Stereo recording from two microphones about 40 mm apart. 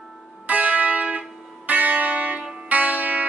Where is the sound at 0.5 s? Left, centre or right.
Right.